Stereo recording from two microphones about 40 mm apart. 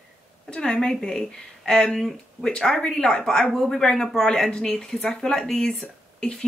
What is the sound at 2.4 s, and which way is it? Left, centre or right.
Speech, centre.